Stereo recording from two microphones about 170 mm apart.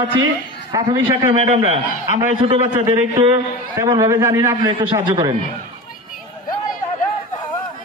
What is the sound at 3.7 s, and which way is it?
Speech, 20° right (ahead or behind).